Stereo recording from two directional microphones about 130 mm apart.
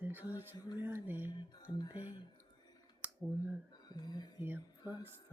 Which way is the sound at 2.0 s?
35° left (ahead or behind).